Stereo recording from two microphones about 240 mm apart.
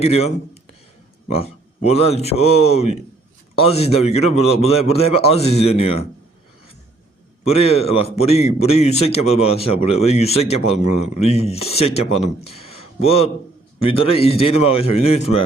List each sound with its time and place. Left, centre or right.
0.0 s a man's voice: left
7.4 s a man's voice: left